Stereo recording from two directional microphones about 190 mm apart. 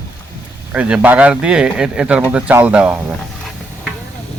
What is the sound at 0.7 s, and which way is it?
Speech, 5° right (ahead or behind).